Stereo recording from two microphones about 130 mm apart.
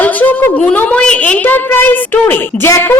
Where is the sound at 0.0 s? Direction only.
15° left (ahead or behind).